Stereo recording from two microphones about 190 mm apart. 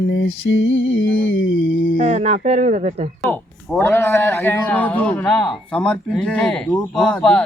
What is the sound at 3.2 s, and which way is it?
Speech, 10° left (ahead or behind).